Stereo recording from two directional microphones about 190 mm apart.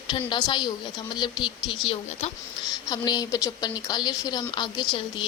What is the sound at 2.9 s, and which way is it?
A woman's voice, 20° left (ahead or behind).